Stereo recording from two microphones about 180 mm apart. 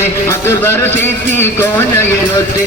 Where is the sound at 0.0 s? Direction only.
15° left (ahead or behind).